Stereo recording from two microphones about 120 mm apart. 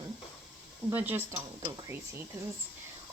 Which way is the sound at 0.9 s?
15° right (ahead or behind).